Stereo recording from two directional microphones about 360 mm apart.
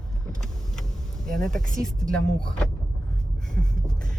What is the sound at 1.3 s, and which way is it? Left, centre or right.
Speech, centre.